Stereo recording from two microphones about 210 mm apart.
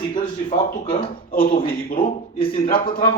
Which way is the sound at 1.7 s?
45° left (ahead or behind).